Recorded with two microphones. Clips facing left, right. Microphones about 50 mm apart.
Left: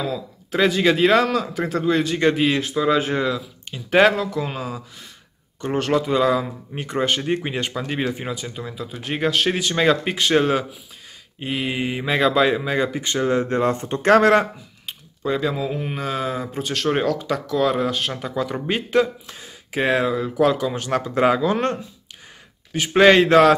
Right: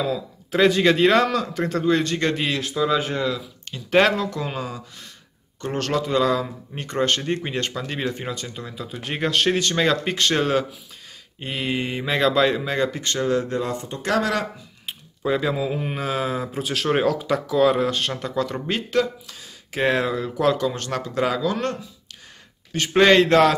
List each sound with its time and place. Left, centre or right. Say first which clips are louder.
0.0 s speech: right 1 dB; centre
3.7 s speech: left 2 dB; centre
13.4 s speech: left 5 dB; left
14.9 s speech: right 1 dB; centre; by 19.5 s left
19.7 s speech: left 1 dB; centre; by 21.7 s left
22.7 s speech: left 2 dB; centre